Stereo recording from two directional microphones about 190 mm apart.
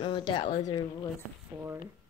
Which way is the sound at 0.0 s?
25° left (ahead or behind).